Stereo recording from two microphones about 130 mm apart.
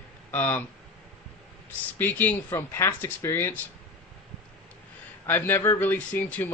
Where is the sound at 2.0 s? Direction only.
15° left (ahead or behind).